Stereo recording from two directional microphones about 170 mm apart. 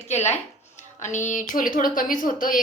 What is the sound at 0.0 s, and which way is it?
A woman's voice, 40° left (ahead or behind).